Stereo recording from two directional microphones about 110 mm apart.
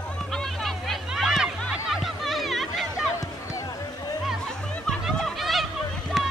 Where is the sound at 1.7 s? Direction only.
Centre (ahead or behind).